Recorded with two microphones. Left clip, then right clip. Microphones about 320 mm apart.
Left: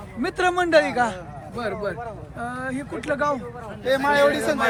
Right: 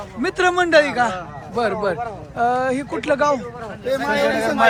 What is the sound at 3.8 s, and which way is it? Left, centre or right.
Speech, centre.